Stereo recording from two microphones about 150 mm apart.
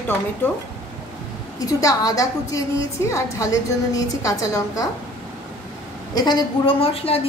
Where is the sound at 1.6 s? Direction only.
25° left (ahead or behind).